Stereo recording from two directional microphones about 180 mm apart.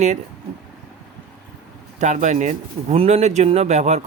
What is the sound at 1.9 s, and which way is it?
Speech, 40° right (ahead or behind).